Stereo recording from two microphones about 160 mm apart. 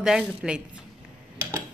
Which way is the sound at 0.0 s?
5° right (ahead or behind).